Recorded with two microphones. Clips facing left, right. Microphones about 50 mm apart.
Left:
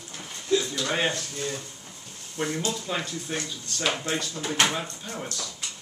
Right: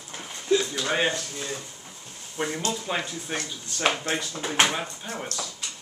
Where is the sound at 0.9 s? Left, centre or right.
Centre.